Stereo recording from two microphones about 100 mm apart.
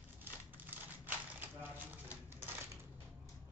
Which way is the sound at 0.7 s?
20° right (ahead or behind).